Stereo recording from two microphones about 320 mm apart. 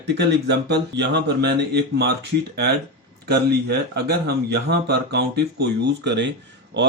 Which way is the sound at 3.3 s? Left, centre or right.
Right.